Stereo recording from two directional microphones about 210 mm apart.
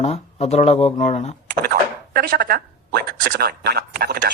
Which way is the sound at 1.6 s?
50° right (ahead or behind).